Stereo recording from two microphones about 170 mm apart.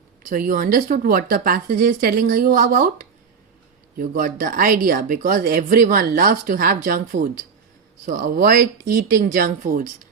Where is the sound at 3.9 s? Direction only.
55° right (ahead or behind).